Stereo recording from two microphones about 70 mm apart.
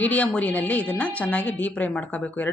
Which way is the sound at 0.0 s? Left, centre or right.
Left.